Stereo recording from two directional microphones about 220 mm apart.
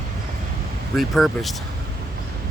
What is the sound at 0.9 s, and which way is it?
Speech, centre (ahead or behind).